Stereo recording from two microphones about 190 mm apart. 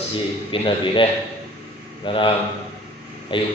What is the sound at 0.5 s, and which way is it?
Speech, 25° left (ahead or behind).